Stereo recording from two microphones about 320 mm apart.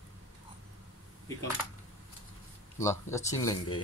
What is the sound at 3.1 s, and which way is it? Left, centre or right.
Speech, centre.